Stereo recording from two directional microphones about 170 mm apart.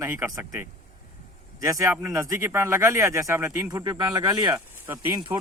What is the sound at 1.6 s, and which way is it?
Speech, 20° right (ahead or behind).